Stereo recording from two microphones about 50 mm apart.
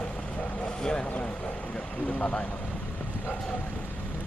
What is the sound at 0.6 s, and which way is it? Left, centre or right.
Vehicle, centre.